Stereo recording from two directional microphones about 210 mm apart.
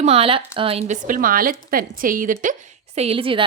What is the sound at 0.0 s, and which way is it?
A woman's voice, 30° right (ahead or behind).